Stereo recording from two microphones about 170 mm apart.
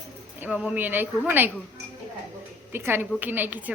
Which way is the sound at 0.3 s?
10° right (ahead or behind).